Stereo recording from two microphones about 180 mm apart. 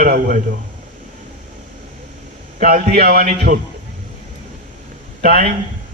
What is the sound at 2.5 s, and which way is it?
A man's voice, 55° right (ahead or behind).